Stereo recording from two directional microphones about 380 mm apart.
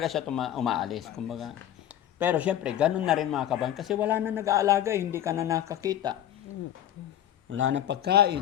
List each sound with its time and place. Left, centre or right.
0.0 s speech: centre
7.5 s speech: right